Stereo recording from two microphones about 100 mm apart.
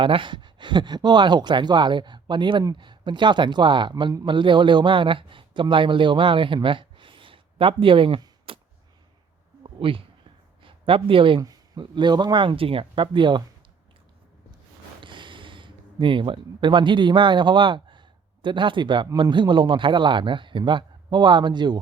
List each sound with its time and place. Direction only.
0.0 s speech: 60° right (ahead or behind)
8.5 s a sound: 65° right (ahead or behind)
9.6 s speech: 65° right (ahead or behind)
11.4 s speech: 40° right (ahead or behind)
15.0 s speech: 55° right (ahead or behind)